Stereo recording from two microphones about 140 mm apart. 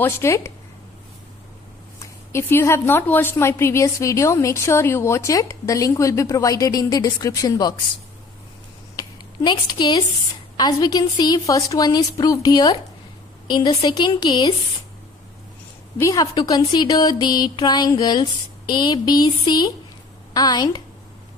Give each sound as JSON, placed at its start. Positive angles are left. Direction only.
{"t": 0.0, "sound": "a woman's voice", "side_deg": 20}
{"t": 2.0, "sound": "a woman's voice", "side_deg": 20}
{"t": 8.9, "sound": "a sound", "side_deg": 30}
{"t": 10.6, "sound": "a woman's voice", "side_deg": 25}
{"t": 16.0, "sound": "a woman's voice", "side_deg": 25}